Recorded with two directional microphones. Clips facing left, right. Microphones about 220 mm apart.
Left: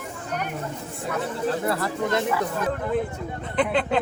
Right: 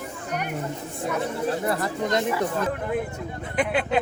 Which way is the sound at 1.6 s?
20° right (ahead or behind).